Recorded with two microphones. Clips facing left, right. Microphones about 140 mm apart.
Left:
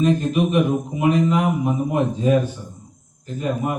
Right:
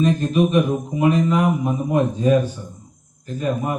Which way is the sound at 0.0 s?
15° left (ahead or behind).